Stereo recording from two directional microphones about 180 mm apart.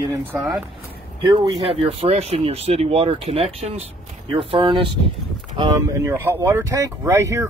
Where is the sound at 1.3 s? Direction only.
25° right (ahead or behind).